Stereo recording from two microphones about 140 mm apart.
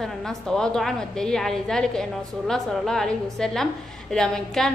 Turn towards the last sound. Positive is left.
turn(degrees=5)  # may be behind; listen again after turning